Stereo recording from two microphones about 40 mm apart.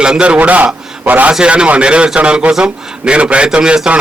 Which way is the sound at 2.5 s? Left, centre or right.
Right.